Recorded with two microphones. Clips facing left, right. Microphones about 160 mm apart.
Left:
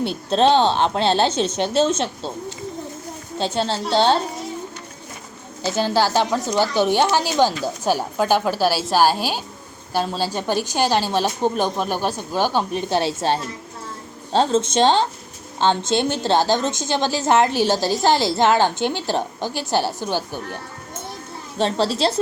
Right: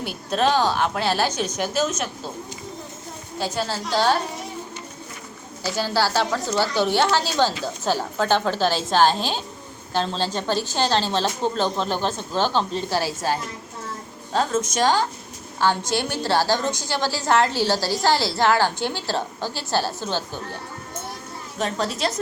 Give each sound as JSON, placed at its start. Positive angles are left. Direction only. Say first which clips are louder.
{"t": 0.0, "sound": "a woman's voice", "louder": "left 5 dB", "side_deg": 25}
{"t": 3.3, "sound": "a woman's voice", "louder": "left 4 dB", "side_deg": 25}
{"t": 5.6, "sound": "a woman's voice", "louder": "left 4 dB", "side_deg": 20}
{"t": 21.6, "sound": "a woman's voice", "louder": "left 5 dB", "side_deg": 30}